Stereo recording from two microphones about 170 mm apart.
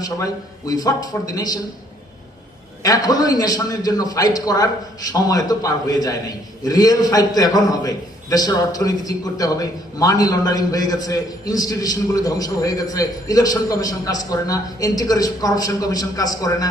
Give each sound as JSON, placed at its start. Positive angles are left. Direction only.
{"t": 0.0, "sound": "a man's voice", "side_deg": 20}
{"t": 2.8, "sound": "a man's voice", "side_deg": 20}